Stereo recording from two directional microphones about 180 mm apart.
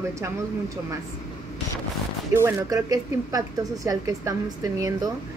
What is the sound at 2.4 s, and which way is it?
A woman's voice, 20° right (ahead or behind).